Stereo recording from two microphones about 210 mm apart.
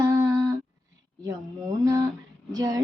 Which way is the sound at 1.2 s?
15° right (ahead or behind).